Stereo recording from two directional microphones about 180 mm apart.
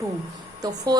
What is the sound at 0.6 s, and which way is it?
Speech, 20° right (ahead or behind).